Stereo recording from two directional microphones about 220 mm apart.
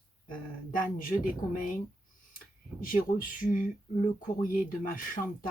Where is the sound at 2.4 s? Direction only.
40° left (ahead or behind).